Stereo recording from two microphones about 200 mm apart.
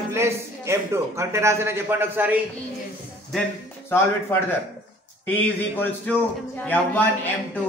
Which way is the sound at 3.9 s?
10° left (ahead or behind).